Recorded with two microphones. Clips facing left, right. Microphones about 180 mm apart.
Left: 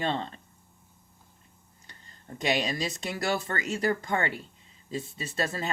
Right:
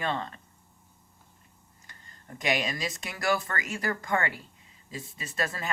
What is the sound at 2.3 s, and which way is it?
Speech, 30° left (ahead or behind).